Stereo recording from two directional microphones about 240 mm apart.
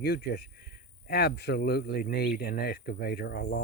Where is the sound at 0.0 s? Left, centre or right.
Left.